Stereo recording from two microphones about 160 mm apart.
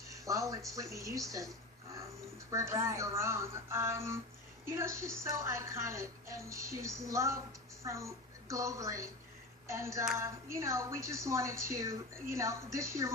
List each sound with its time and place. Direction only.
0.1 s speech: 20° right (ahead or behind)
2.5 s a woman's voice: 20° right (ahead or behind)